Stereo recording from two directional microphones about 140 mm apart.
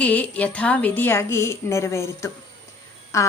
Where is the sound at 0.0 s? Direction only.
10° left (ahead or behind).